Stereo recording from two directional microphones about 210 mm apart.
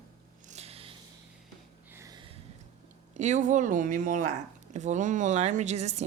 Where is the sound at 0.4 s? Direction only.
30° right (ahead or behind).